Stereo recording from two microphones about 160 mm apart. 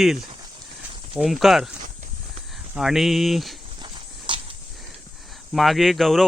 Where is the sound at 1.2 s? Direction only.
Centre (ahead or behind).